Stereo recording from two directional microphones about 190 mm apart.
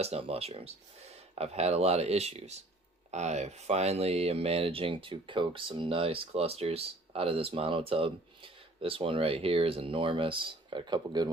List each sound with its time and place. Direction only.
0.0 s speech: 30° right (ahead or behind)